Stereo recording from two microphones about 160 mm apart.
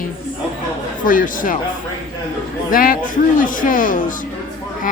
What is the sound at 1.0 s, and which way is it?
Speech, 60° left (ahead or behind).